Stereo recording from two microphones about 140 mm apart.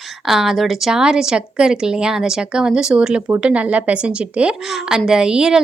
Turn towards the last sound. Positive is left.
turn(degrees=-5)  # may be behind; listen again after turning